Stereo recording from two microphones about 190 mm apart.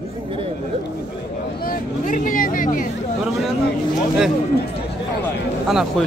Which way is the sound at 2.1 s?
45° left (ahead or behind).